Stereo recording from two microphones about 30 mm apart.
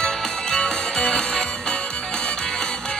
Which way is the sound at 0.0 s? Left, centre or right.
Left.